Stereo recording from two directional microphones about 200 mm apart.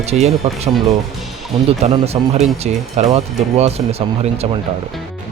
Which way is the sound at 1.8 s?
30° right (ahead or behind).